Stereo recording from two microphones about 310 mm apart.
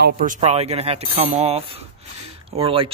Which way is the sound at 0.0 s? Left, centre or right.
Right.